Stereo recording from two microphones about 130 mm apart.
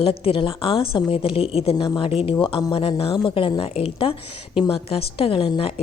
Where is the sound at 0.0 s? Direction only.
45° left (ahead or behind).